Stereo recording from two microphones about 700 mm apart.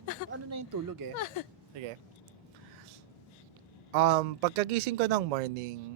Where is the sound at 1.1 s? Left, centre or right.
Left.